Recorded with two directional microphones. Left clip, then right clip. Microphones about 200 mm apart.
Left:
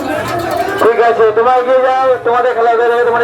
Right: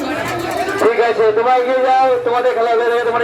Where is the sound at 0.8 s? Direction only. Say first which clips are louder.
Left 4 dB; 15° right (ahead or behind); by 3.2 s 40° right (ahead or behind).